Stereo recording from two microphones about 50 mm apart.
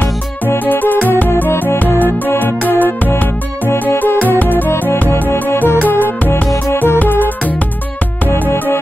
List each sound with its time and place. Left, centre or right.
0.7 s music: left